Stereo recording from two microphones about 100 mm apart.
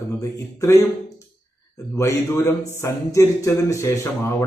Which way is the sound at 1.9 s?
30° left (ahead or behind).